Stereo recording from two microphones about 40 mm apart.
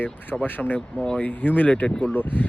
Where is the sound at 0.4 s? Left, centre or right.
Left.